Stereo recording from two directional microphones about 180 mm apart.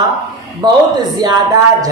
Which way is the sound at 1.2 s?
20° right (ahead or behind).